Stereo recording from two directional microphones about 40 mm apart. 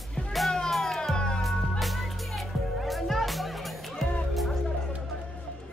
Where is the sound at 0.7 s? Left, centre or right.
Centre.